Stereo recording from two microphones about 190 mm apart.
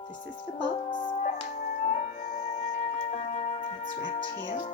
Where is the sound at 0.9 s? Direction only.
25° left (ahead or behind).